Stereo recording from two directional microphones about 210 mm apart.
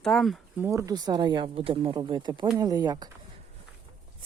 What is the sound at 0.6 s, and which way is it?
Speech, 15° right (ahead or behind).